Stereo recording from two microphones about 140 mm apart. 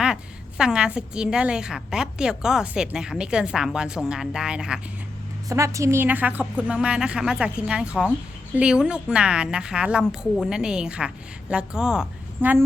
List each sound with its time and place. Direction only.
0.0 s a woman's voice: 5° right (ahead or behind)
5.5 s a woman's voice: 20° right (ahead or behind)